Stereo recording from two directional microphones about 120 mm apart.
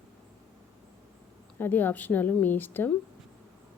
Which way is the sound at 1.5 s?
15° left (ahead or behind).